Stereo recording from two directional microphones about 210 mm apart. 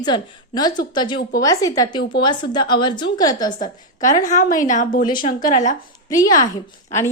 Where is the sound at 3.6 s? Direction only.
40° left (ahead or behind).